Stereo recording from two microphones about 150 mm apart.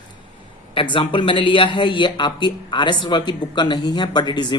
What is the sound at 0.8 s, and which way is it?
Speech, 35° left (ahead or behind).